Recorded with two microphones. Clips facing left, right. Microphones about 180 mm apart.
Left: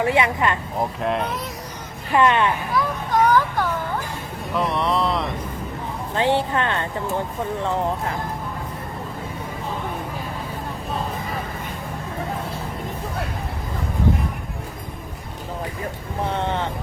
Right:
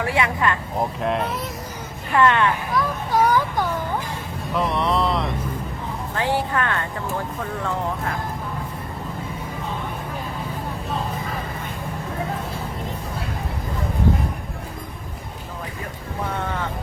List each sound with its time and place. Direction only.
0.0 s speech: 20° left (ahead or behind)
0.8 s speech: centre (ahead or behind)
2.1 s speech: 20° left (ahead or behind)
2.7 s a child's voice: 10° right (ahead or behind)
4.5 s speech: centre (ahead or behind)
6.1 s speech: 25° left (ahead or behind)
16.4 s speech: 25° left (ahead or behind)